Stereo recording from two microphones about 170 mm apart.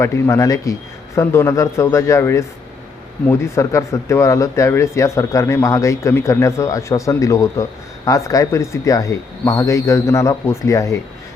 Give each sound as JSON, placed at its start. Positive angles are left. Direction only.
{"t": 0.0, "sound": "speech", "side_deg": 15}